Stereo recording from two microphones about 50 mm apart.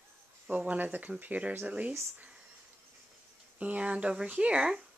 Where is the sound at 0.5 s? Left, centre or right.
Right.